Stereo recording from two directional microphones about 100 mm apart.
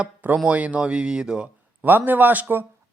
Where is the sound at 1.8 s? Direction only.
20° right (ahead or behind).